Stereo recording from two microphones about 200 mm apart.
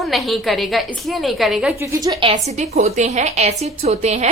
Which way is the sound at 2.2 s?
30° right (ahead or behind).